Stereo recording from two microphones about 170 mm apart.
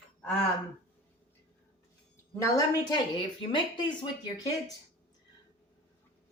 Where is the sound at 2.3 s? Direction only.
20° left (ahead or behind).